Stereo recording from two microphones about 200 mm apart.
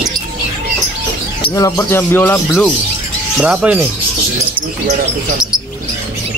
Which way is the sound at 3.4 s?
5° right (ahead or behind).